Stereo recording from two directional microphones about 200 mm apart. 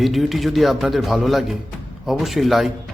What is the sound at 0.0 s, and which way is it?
A man's voice, centre (ahead or behind).